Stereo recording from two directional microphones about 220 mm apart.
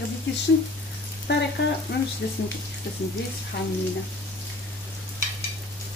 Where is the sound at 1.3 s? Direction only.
50° left (ahead or behind).